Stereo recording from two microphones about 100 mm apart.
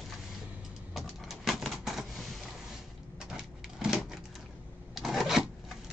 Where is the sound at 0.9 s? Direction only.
5° right (ahead or behind).